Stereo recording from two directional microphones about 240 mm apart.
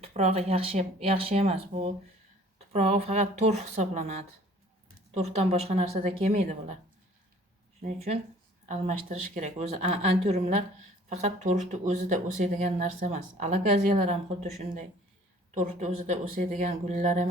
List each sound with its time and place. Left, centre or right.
0.0 s a woman's voice: right
7.8 s a woman's voice: right